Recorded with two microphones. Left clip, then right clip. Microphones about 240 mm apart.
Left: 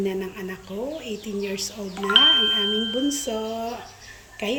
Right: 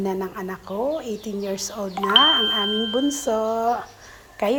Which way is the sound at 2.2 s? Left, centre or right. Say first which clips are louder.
Left 1 dB; right.